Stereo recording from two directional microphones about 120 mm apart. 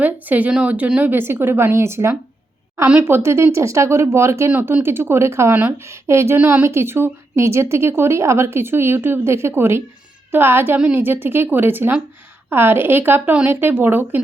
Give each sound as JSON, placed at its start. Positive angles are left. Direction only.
{"t": 0.0, "sound": "a woman's voice", "side_deg": -15}